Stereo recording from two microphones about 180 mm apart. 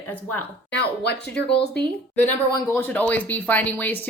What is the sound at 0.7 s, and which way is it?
Speech, 70° left (ahead or behind).